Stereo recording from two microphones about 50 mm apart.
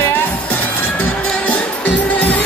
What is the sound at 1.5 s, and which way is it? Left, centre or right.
Music, left.